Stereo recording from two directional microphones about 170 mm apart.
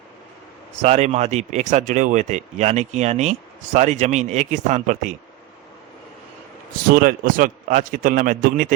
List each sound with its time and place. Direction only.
0.8 s a man's voice: 40° right (ahead or behind)
6.9 s a man's voice: 55° right (ahead or behind)